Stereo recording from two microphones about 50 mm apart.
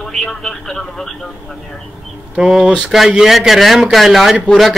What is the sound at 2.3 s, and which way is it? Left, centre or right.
A man's voice, centre.